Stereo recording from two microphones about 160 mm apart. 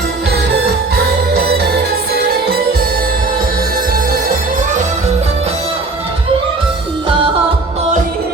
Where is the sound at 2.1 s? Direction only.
75° right (ahead or behind).